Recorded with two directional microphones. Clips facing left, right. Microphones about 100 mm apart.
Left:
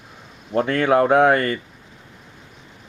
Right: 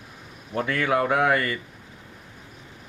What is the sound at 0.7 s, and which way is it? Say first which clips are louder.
Speech: left 7 dB; 30° left (ahead or behind).